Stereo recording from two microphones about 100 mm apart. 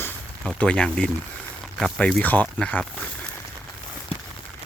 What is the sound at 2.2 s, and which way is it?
Speech, 15° left (ahead or behind).